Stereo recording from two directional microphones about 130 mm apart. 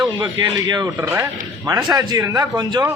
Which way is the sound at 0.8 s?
25° right (ahead or behind).